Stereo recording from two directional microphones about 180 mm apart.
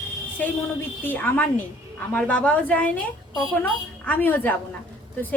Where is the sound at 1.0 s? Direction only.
10° left (ahead or behind).